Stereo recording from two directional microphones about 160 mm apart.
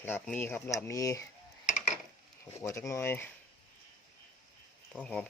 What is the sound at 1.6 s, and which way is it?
Chop, 50° left (ahead or behind).